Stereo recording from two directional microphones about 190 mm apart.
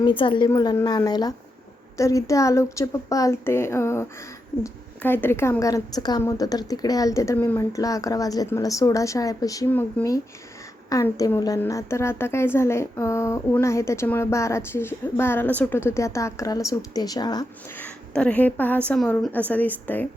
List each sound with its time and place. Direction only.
0.0 s a woman's voice: 25° left (ahead or behind)
17.7 s a woman's voice: 5° left (ahead or behind)